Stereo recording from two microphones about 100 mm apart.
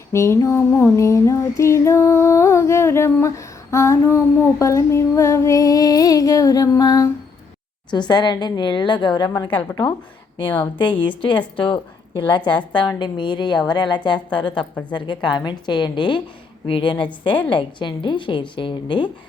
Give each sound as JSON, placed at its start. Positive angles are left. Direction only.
{"t": 0.1, "sound": "a sound", "side_deg": 25}
{"t": 0.4, "sound": "music", "side_deg": 25}
{"t": 6.7, "sound": "a sound", "side_deg": 35}
{"t": 7.9, "sound": "a woman's voice", "side_deg": 45}
{"t": 9.5, "sound": "a woman's voice", "side_deg": 15}
{"t": 11.0, "sound": "a woman's voice", "side_deg": 55}
{"t": 14.5, "sound": "a woman's voice", "side_deg": 10}
{"t": 14.9, "sound": "a woman's voice", "side_deg": 50}
{"t": 17.2, "sound": "a woman's voice", "side_deg": 15}
{"t": 17.5, "sound": "a woman's voice", "side_deg": 55}